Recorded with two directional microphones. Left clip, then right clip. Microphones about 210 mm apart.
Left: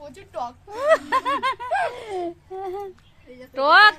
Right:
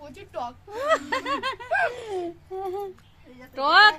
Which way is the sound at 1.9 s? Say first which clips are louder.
Left 2 dB; 35° left (ahead or behind).